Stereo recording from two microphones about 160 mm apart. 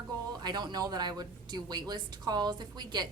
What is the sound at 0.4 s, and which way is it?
A woman's voice, 25° right (ahead or behind).